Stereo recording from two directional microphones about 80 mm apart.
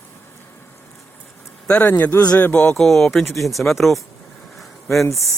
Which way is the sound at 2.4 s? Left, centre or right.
Left.